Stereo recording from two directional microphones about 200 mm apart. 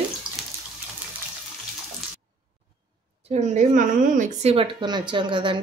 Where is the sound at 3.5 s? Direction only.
40° right (ahead or behind).